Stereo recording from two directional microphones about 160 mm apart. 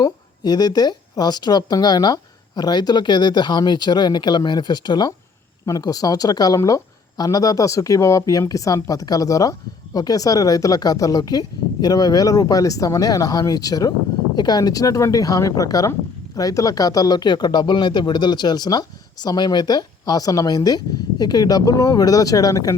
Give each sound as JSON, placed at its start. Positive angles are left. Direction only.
{"t": 0.0, "sound": "speech", "side_deg": 25}